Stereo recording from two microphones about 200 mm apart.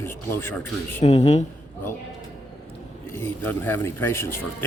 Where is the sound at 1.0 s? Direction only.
30° left (ahead or behind).